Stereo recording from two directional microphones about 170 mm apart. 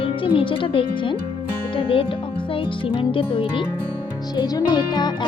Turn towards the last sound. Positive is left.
turn(degrees=25)  # may be behind; listen again after turning